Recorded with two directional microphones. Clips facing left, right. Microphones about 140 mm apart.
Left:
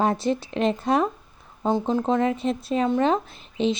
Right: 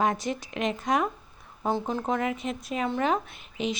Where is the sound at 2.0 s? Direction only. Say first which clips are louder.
Left 6 dB; 30° left (ahead or behind).